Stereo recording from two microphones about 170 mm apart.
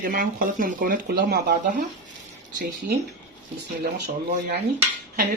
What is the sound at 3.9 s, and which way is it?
Speech, 70° right (ahead or behind).